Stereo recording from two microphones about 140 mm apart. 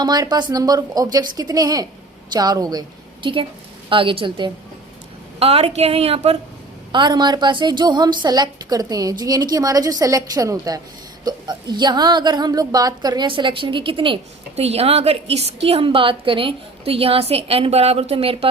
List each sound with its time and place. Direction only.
0.0 s a woman's voice: 30° right (ahead or behind)
3.8 s a woman's voice: 40° right (ahead or behind)
6.9 s a woman's voice: 30° right (ahead or behind)